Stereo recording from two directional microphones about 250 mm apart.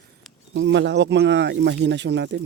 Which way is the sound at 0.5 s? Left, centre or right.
Right.